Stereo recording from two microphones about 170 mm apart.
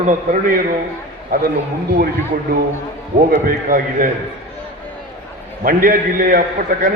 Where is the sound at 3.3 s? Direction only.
55° right (ahead or behind).